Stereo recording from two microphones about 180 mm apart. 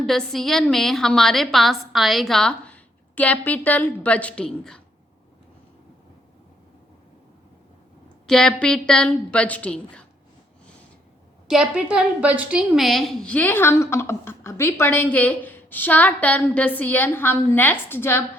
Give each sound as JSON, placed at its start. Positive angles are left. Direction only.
{"t": 0.0, "sound": "a woman's voice", "side_deg": 0}
{"t": 8.3, "sound": "a woman's voice", "side_deg": 5}
{"t": 11.4, "sound": "a woman's voice", "side_deg": -5}